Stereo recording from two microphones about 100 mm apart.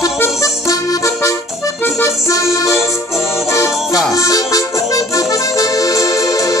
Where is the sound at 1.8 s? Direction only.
25° left (ahead or behind).